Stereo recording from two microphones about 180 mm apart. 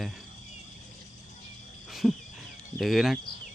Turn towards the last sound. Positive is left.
turn(degrees=0)  # may be behind; listen again after turning